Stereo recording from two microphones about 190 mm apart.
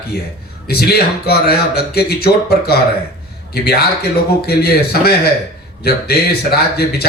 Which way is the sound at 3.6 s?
55° left (ahead or behind).